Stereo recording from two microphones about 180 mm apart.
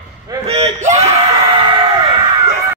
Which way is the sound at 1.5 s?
25° right (ahead or behind).